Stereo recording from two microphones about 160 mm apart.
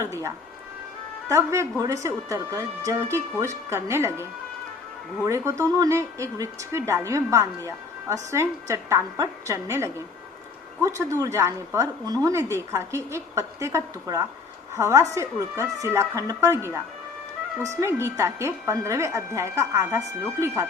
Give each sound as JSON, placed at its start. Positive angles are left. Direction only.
{"t": 0.0, "sound": "a woman's voice", "side_deg": -15}